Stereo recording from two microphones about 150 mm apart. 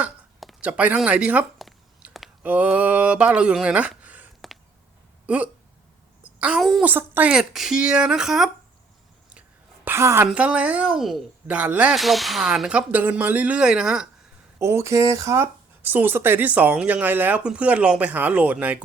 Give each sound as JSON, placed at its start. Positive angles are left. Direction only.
{"t": 0.0, "sound": "a sound", "side_deg": -5}
{"t": 2.4, "sound": "a child's voice", "side_deg": -10}
{"t": 6.8, "sound": "speech", "side_deg": -10}
{"t": 9.8, "sound": "a sound", "side_deg": -15}
{"t": 10.2, "sound": "speech", "side_deg": -10}
{"t": 14.6, "sound": "speech", "side_deg": -20}